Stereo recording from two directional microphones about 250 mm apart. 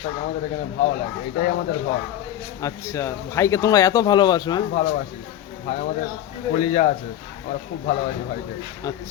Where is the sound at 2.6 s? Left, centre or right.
Centre.